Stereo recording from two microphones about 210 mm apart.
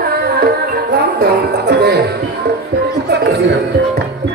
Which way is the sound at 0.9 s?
50° right (ahead or behind).